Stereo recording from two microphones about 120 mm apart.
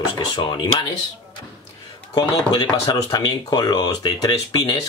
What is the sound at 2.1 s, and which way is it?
Speech, 30° left (ahead or behind).